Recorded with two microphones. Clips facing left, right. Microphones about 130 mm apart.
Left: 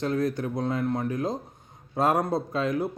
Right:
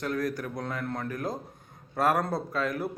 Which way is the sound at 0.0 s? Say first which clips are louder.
Left 4 dB; 25° left (ahead or behind).